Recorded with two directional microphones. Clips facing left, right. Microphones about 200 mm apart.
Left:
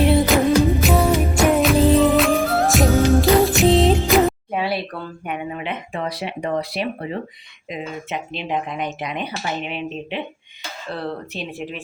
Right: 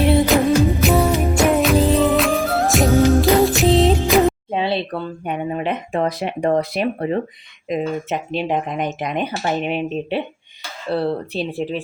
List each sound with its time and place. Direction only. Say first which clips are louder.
0.0 s music: right 1 dB; centre (ahead or behind)
4.5 s speech: right 3 dB; 25° right (ahead or behind)